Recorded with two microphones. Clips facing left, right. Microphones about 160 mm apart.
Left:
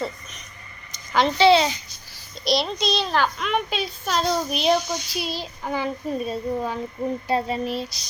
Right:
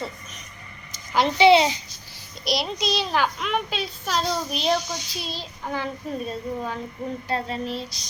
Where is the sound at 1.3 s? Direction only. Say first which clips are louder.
Right 1 dB; 20° right (ahead or behind).